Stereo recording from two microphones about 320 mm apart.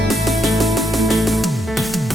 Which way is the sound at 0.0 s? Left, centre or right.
Centre.